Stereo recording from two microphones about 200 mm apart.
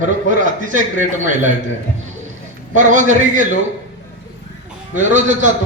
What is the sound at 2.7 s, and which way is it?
Speech, 40° right (ahead or behind).